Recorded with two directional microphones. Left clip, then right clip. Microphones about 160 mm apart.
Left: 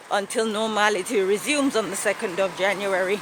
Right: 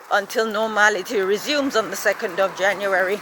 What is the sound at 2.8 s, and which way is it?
Speech, 20° left (ahead or behind).